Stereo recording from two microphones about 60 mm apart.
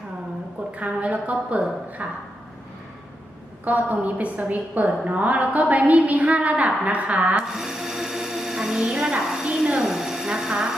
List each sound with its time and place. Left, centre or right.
0.8 s a woman's voice: right
3.6 s a woman's voice: right
7.4 s music: centre
9.0 s a woman's voice: centre
9.8 s a sound: centre